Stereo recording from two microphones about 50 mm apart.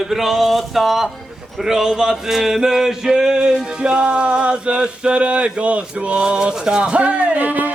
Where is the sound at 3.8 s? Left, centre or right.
Centre.